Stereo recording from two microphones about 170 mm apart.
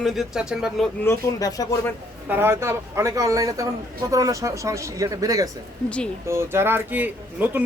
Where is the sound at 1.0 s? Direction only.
20° left (ahead or behind).